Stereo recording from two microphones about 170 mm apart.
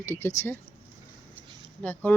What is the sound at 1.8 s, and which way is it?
Speech, 10° left (ahead or behind).